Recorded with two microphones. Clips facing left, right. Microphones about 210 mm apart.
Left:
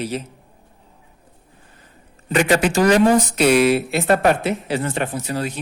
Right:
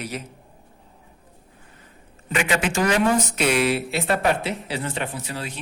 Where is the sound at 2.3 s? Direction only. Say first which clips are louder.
Left 6 dB; 40° left (ahead or behind).